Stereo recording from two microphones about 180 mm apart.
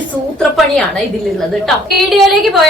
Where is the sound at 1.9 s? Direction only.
Centre (ahead or behind).